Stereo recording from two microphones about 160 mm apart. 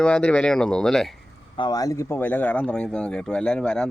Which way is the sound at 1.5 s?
25° left (ahead or behind).